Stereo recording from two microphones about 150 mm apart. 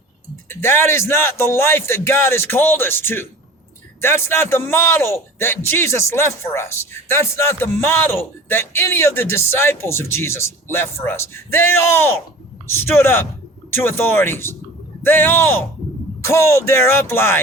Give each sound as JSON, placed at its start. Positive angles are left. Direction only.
{"t": 0.4, "sound": "a man's voice", "side_deg": 15}